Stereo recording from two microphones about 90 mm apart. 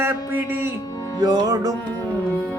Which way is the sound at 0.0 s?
25° right (ahead or behind).